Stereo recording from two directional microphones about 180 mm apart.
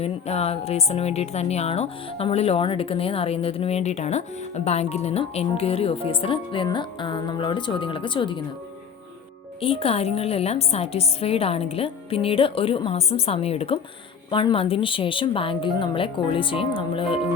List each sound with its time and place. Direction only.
0.0 s a woman's voice: 35° left (ahead or behind)
9.6 s a woman's voice: 30° left (ahead or behind)